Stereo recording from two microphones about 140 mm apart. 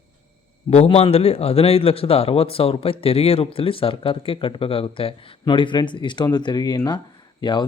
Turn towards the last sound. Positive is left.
turn(degrees=30)  # may be behind; listen again after turning